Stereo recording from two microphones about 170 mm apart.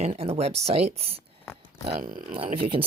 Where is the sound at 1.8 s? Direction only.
55° right (ahead or behind).